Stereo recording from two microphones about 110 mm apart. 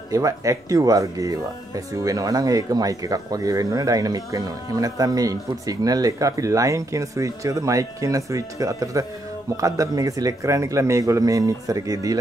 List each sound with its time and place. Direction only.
0.1 s speech: 30° right (ahead or behind)